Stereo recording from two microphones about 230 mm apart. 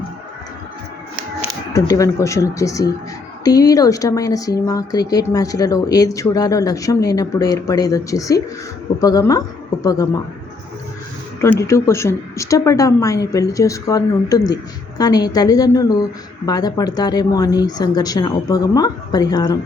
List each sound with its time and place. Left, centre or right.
1.7 s speech: centre
11.3 s speech: centre